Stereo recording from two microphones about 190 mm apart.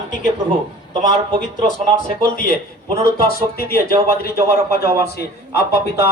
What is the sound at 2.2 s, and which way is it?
Speech, 45° left (ahead or behind).